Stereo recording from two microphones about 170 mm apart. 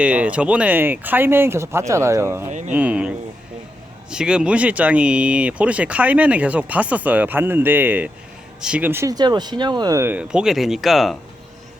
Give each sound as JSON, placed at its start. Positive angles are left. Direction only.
{"t": 0.0, "sound": "speech", "side_deg": -10}
{"t": 2.5, "sound": "speech", "side_deg": -45}
{"t": 2.7, "sound": "speech", "side_deg": -10}